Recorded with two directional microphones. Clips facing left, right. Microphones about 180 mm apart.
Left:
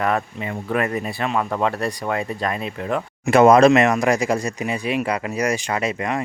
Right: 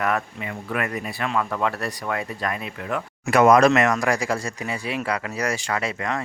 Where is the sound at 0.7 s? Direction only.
35° left (ahead or behind).